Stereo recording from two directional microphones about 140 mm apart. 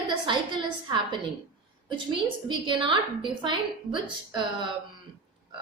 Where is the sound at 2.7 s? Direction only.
35° right (ahead or behind).